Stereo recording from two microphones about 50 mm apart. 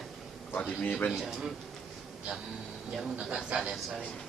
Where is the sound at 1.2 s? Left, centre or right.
Centre.